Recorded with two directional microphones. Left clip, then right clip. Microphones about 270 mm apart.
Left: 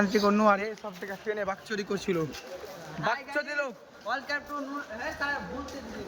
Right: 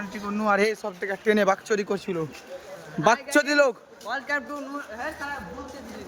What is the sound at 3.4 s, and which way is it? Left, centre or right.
Speech, right.